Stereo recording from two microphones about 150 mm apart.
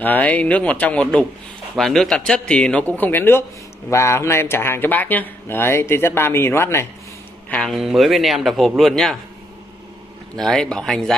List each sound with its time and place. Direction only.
0.0 s speech: 10° left (ahead or behind)
7.4 s speech: 5° left (ahead or behind)
10.3 s speech: 5° left (ahead or behind)